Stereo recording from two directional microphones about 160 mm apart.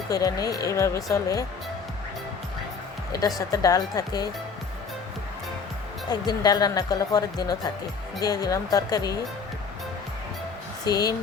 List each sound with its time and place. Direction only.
0.1 s speech: 20° left (ahead or behind)
3.1 s speech: 20° left (ahead or behind)
6.1 s speech: 25° left (ahead or behind)
10.8 s speech: 25° left (ahead or behind)